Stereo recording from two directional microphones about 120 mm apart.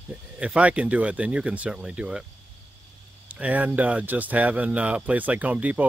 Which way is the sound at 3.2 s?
10° right (ahead or behind).